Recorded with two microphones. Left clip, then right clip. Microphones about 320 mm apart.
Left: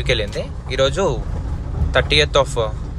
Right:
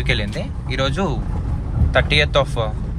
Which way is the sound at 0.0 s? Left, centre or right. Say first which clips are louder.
Left 2 dB; centre.